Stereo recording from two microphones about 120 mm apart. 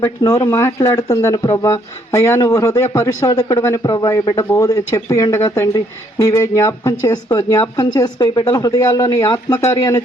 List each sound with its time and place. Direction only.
0.2 s a man's voice: 30° left (ahead or behind)